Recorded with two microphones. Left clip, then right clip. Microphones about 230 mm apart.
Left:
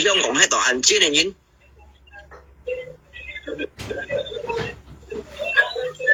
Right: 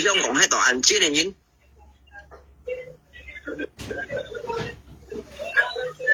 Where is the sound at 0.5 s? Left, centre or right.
Centre.